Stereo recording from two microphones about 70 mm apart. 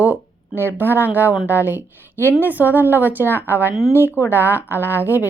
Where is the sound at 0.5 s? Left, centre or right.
Right.